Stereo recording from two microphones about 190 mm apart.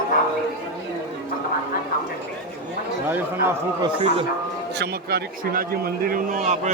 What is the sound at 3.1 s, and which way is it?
Speech, 15° right (ahead or behind).